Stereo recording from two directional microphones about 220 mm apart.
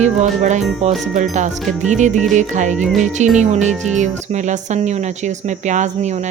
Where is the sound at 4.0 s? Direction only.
35° right (ahead or behind).